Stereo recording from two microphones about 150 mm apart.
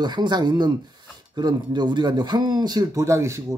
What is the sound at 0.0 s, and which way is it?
Speech, 30° right (ahead or behind).